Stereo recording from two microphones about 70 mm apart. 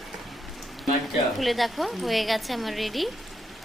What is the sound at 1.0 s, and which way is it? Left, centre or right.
A woman's voice, centre.